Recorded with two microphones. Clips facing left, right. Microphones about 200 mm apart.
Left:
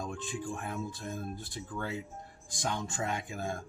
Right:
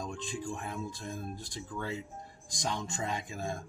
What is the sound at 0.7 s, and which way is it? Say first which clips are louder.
Speech: left 1 dB; 5° left (ahead or behind).